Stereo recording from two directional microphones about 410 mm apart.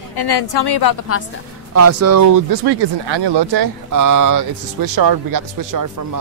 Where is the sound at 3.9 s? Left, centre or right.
Right.